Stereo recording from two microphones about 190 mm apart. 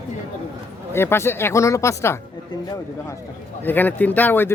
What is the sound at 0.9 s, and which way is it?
A man's voice, 10° left (ahead or behind).